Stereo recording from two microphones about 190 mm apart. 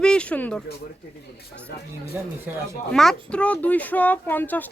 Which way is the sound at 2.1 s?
10° right (ahead or behind).